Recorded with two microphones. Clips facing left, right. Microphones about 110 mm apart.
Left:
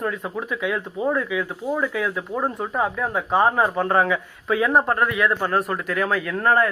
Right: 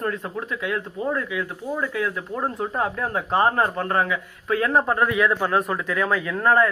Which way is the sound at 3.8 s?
20° left (ahead or behind).